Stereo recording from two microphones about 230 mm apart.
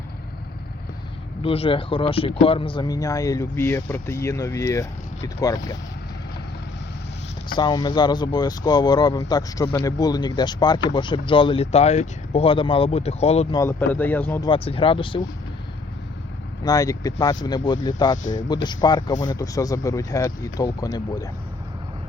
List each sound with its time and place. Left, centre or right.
1.4 s speech: left
7.5 s speech: centre
13.6 s speech: centre
14.5 s speech: left
16.6 s speech: centre